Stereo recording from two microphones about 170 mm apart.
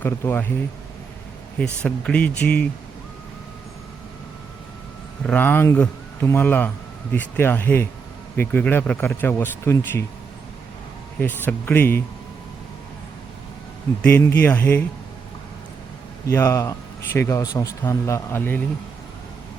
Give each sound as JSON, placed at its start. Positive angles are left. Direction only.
{"t": 0.0, "sound": "speech", "side_deg": 10}
{"t": 1.5, "sound": "speech", "side_deg": 5}
{"t": 5.2, "sound": "speech", "side_deg": 10}
{"t": 11.2, "sound": "speech", "side_deg": 10}
{"t": 14.0, "sound": "speech", "side_deg": 15}
{"t": 16.2, "sound": "speech", "side_deg": 15}